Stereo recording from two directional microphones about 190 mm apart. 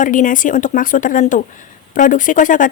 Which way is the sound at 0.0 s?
45° left (ahead or behind).